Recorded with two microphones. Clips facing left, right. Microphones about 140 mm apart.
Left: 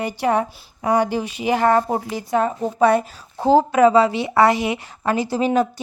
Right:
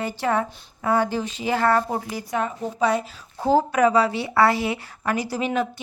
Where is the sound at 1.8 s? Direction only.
25° left (ahead or behind).